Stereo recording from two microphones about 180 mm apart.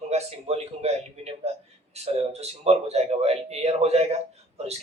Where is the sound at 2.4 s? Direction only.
35° right (ahead or behind).